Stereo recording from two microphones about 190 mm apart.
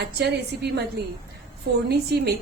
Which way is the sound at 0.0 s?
60° right (ahead or behind).